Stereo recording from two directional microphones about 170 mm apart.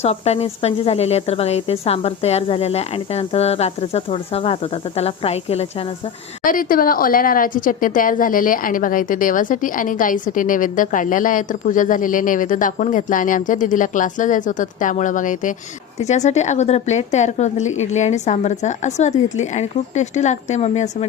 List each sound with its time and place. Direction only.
0.0 s speech: 40° left (ahead or behind)
6.4 s a woman's voice: 55° left (ahead or behind)